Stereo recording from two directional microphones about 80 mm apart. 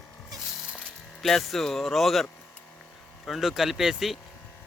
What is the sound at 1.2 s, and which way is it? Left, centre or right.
Speech, centre.